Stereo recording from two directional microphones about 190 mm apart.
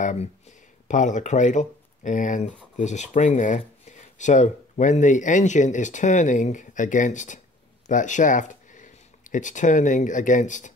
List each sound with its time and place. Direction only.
0.0 s speech: 35° left (ahead or behind)